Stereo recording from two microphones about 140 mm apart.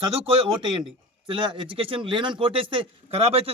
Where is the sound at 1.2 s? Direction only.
35° right (ahead or behind).